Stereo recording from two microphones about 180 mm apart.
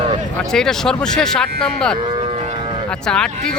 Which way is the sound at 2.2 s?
35° right (ahead or behind).